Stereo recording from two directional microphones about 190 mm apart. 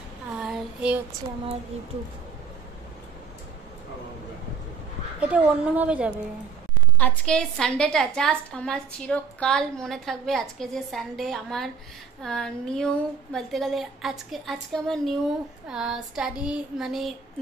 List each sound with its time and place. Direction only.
0.4 s child singing: 5° right (ahead or behind)
5.2 s a woman's voice: 5° right (ahead or behind)
7.0 s a woman's voice: 5° left (ahead or behind)